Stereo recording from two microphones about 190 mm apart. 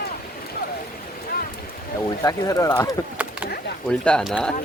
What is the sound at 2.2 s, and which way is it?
Speech, 15° left (ahead or behind).